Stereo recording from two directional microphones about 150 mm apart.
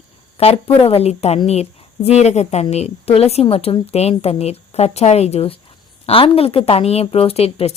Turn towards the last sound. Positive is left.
turn(degrees=40)  # may be behind; listen again after turning